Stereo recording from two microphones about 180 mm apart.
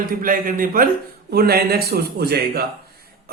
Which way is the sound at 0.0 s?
50° right (ahead or behind).